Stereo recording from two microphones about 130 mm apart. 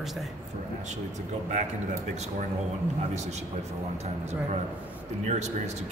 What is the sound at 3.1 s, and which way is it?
A man's voice, 60° right (ahead or behind).